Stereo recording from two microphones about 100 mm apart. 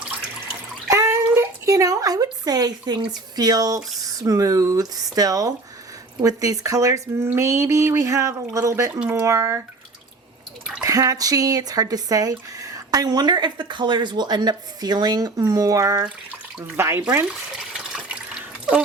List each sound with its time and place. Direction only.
0.9 s speech: 30° right (ahead or behind)
10.8 s speech: 35° right (ahead or behind)
17.6 s water: 5° right (ahead or behind)